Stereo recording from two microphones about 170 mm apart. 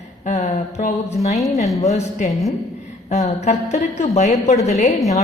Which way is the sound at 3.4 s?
40° left (ahead or behind).